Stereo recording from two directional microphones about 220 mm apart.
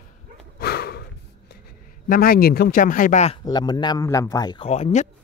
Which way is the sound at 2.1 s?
40° left (ahead or behind).